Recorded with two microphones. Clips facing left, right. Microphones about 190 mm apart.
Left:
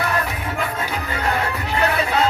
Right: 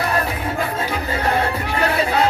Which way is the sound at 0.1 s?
35° right (ahead or behind).